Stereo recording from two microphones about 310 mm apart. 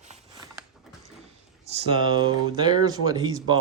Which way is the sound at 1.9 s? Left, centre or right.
Centre.